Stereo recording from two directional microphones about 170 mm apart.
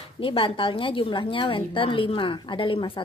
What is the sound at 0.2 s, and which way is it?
A woman's voice, 30° left (ahead or behind).